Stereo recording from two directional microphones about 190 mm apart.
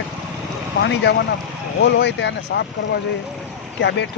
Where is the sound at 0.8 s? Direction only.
65° left (ahead or behind).